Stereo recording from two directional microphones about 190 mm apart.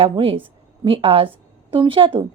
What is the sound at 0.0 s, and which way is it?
A woman's voice, 30° right (ahead or behind).